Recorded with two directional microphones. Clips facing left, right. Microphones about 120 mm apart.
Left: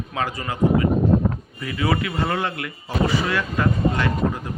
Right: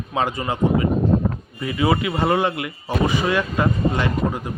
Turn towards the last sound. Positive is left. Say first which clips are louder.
# right 1 dB
turn(degrees=-20)  # may be behind; listen again after turning